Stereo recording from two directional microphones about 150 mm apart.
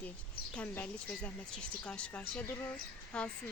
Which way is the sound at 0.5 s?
10° left (ahead or behind).